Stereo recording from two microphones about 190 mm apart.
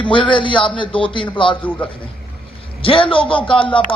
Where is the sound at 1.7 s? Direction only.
10° right (ahead or behind).